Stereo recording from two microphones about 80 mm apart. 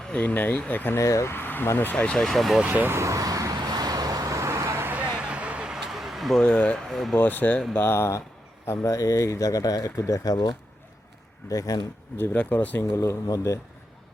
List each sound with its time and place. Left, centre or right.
0.0 s speech: centre
0.9 s speech: left
1.3 s speech: left; by 2.6 s centre
2.6 s speech: right
3.0 s vehicle: right
4.9 s a sound: centre
6.4 s speech: centre
6.7 s speech: centre
7.2 s speech: left
12.1 s speech: left
12.9 s speech: left